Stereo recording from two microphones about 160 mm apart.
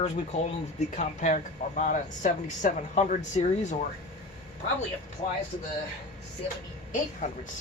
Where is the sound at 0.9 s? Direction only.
50° left (ahead or behind).